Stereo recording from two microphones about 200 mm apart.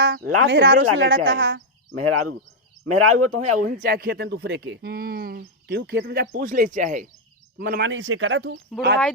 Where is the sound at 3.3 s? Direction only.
40° right (ahead or behind).